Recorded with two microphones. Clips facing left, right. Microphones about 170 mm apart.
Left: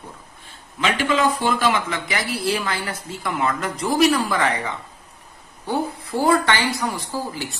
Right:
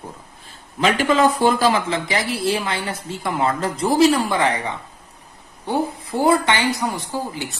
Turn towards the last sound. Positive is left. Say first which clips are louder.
# right 1 dB
turn(degrees=-20)  # may be behind; listen again after turning